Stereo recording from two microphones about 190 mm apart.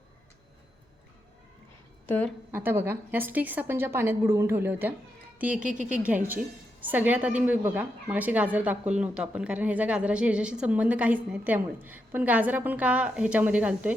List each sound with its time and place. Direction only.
2.0 s a woman's voice: 10° left (ahead or behind)
2.5 s a woman's voice: 10° right (ahead or behind)
5.6 s speech: 40° right (ahead or behind)
6.0 s a woman's voice: 10° right (ahead or behind)